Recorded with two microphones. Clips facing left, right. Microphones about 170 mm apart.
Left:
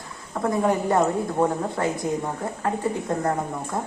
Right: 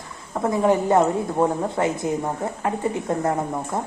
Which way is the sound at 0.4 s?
20° right (ahead or behind).